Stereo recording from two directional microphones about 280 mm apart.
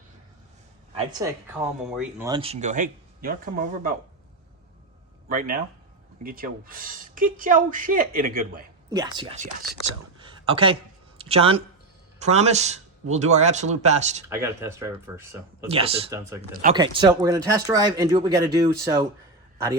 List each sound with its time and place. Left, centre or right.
1.2 s speech: centre; by 3.9 s right
5.3 s speech: right
8.9 s speech: centre
10.2 s a sound: centre
11.2 s speech: right
14.3 s speech: centre
15.7 s speech: right
16.0 s speech: centre